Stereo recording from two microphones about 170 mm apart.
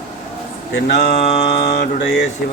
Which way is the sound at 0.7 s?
70° left (ahead or behind).